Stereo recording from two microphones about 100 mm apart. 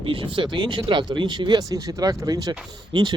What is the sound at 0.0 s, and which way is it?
Speech, 60° right (ahead or behind).